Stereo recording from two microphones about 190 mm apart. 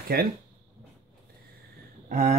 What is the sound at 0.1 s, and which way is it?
Speech, 55° right (ahead or behind).